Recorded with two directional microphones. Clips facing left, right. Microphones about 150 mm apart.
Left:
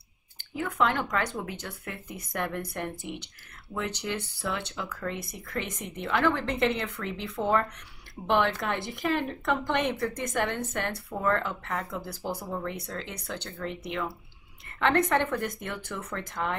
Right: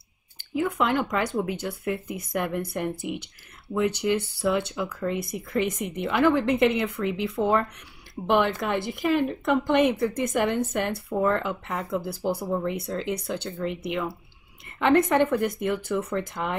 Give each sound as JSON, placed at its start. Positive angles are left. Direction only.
{"t": 0.6, "sound": "speech", "side_deg": -10}